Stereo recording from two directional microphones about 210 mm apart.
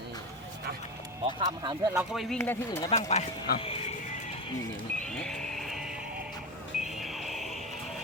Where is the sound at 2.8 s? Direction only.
30° left (ahead or behind).